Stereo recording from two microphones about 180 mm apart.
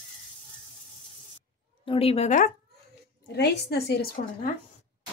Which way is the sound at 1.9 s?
35° left (ahead or behind).